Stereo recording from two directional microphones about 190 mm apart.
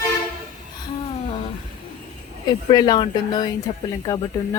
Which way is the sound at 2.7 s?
20° left (ahead or behind).